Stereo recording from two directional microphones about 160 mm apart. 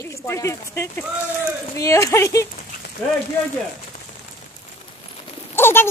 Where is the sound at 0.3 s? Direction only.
15° left (ahead or behind).